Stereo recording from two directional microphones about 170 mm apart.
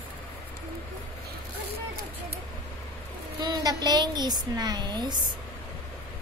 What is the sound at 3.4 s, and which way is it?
Speech, 25° right (ahead or behind).